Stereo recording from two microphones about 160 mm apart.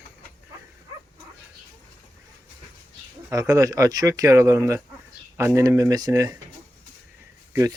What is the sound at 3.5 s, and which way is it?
Speech, 20° right (ahead or behind).